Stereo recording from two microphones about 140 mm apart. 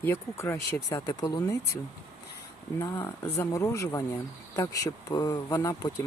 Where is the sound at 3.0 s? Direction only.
20° left (ahead or behind).